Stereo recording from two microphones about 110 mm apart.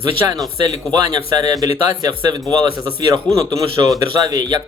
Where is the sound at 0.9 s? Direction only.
35° right (ahead or behind).